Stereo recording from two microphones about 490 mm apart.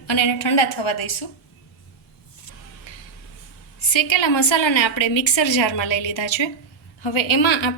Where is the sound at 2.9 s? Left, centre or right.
Left.